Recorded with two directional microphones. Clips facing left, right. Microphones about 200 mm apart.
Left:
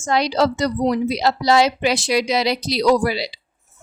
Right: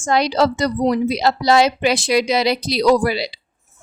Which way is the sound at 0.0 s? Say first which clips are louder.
Right 2 dB; 55° right (ahead or behind).